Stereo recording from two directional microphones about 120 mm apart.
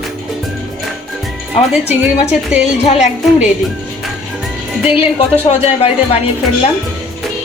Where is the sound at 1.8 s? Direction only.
15° right (ahead or behind).